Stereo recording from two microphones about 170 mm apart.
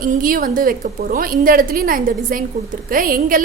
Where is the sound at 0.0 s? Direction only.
55° right (ahead or behind).